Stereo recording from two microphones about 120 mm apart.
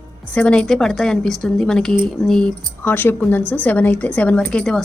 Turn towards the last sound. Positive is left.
turn(degrees=10)  # may be behind; listen again after turning